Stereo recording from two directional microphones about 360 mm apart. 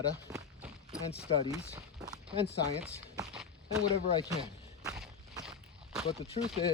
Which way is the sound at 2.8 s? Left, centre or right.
Centre.